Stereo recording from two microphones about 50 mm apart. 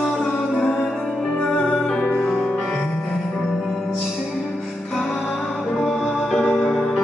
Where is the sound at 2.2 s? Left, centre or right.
Centre.